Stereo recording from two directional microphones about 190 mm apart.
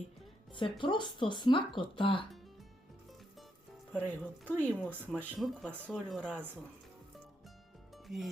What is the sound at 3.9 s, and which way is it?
Speech, 10° left (ahead or behind).